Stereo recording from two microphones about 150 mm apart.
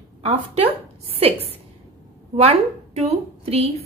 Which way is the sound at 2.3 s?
40° right (ahead or behind).